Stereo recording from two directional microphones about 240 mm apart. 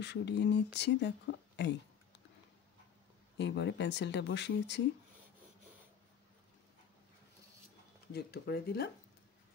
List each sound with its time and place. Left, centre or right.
0.0 s speech: left
3.3 s speech: left
8.1 s speech: left